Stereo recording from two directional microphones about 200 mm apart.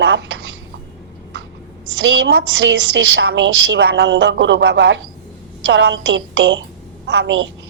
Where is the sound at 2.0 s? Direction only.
65° right (ahead or behind).